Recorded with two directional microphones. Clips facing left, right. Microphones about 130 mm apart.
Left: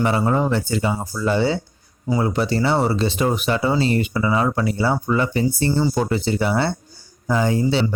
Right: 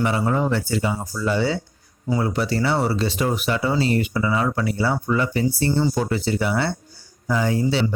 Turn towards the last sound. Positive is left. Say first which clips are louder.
# left 2 dB
turn(degrees=25)  # may be behind; listen again after turning